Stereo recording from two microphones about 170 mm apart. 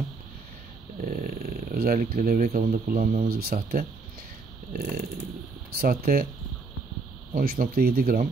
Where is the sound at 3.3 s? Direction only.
60° right (ahead or behind).